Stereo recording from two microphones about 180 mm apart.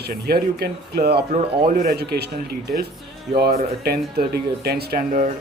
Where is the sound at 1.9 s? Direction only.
60° right (ahead or behind).